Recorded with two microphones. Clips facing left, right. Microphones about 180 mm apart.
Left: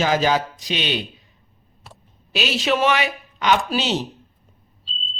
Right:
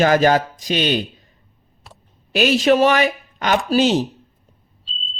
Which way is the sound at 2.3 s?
50° right (ahead or behind).